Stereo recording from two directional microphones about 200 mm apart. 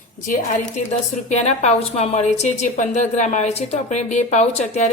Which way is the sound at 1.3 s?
35° left (ahead or behind).